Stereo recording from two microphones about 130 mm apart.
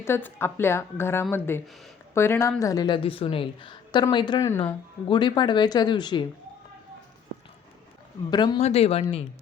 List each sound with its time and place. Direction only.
0.0 s a woman's voice: 15° left (ahead or behind); by 4.4 s 35° left (ahead or behind)
4.4 s a woman's voice: 20° left (ahead or behind)
4.6 s speech: 40° left (ahead or behind)
8.3 s speech: 30° left (ahead or behind)
8.6 s speech: 50° left (ahead or behind)